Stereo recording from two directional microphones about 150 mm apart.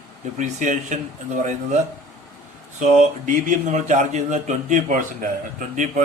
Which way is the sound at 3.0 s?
55° right (ahead or behind).